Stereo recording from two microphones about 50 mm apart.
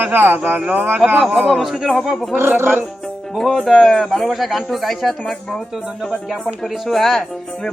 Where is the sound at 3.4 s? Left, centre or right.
Centre.